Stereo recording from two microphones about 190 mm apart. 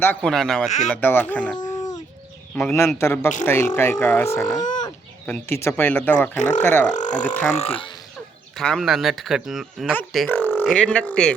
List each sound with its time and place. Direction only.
0.0 s speech: 5° left (ahead or behind)
1.5 s a sound: 20° left (ahead or behind)
2.6 s speech: 10° left (ahead or behind)
6.9 s speech: 40° left (ahead or behind)
8.5 s speech: centre (ahead or behind)
10.2 s a sound: 10° left (ahead or behind)
10.6 s speech: centre (ahead or behind)